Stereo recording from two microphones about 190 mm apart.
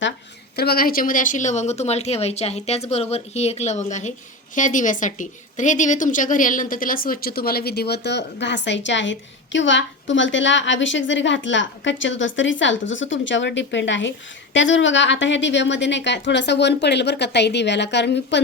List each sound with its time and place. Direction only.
0.5 s a woman's voice: 55° left (ahead or behind)